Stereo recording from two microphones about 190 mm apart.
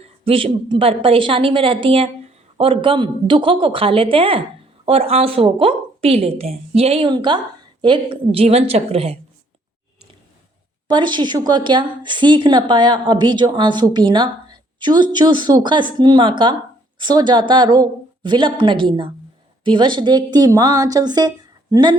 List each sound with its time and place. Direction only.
0.0 s a woman's voice: 30° right (ahead or behind)
10.8 s speech: 25° right (ahead or behind)